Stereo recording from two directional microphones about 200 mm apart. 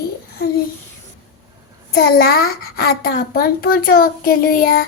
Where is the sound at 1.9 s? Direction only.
50° left (ahead or behind).